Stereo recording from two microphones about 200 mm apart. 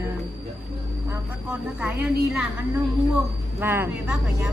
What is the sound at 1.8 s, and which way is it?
A woman's voice, 5° right (ahead or behind).